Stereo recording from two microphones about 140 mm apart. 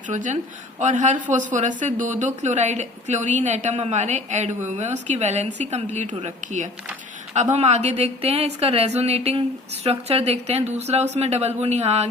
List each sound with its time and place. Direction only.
0.1 s a woman's voice: 60° right (ahead or behind)